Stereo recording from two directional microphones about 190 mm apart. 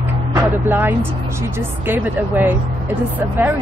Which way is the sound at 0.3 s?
10° right (ahead or behind).